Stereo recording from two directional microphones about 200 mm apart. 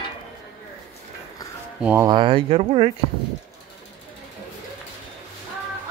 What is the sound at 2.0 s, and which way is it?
Speech, 25° right (ahead or behind).